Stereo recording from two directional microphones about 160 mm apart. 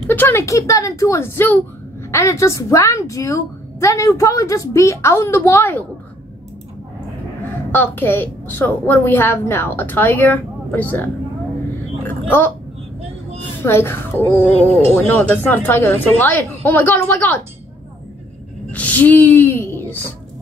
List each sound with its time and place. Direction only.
0.0 s a woman's voice: 10° left (ahead or behind)
7.7 s a woman's voice: 10° left (ahead or behind)
12.0 s a sound: 15° left (ahead or behind)
13.6 s a woman's voice: 15° left (ahead or behind)
18.7 s speech: 10° left (ahead or behind)